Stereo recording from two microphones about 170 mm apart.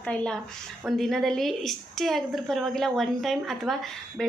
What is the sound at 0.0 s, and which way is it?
A woman's voice, 5° left (ahead or behind).